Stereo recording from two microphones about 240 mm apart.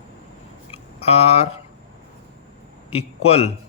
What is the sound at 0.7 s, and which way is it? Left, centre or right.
Speech, left.